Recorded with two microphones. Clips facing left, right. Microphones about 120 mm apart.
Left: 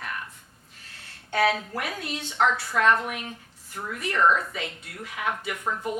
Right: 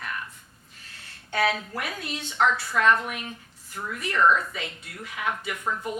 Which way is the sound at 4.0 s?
50° left (ahead or behind).